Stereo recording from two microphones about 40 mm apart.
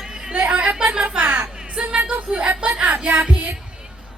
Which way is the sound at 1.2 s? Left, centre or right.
Right.